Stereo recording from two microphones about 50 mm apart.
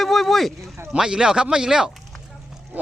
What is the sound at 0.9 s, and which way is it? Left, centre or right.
Speech, centre.